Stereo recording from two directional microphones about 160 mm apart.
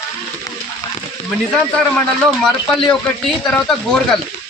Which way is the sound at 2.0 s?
Centre (ahead or behind).